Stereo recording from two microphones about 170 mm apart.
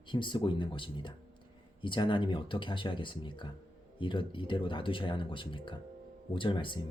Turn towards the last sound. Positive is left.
turn(degrees=30)  # may be behind; listen again after turning